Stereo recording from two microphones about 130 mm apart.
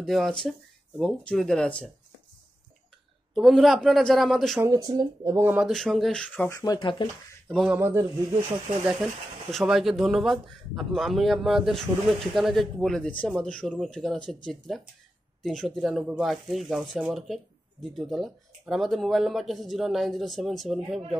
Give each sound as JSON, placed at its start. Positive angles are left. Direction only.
{"t": 0.0, "sound": "speech", "side_deg": 0}
{"t": 3.3, "sound": "speech", "side_deg": 0}
{"t": 4.6, "sound": "speech", "side_deg": -30}
{"t": 5.7, "sound": "speech", "side_deg": 0}
{"t": 6.3, "sound": "speech", "side_deg": 15}
{"t": 6.6, "sound": "speech", "side_deg": 35}
{"t": 7.7, "sound": "speech", "side_deg": -20}
{"t": 9.5, "sound": "speech", "side_deg": 0}